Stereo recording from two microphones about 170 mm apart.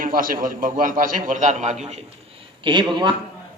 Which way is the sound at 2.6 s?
30° right (ahead or behind).